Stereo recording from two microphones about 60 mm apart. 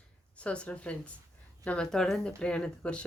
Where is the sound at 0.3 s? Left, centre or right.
Left.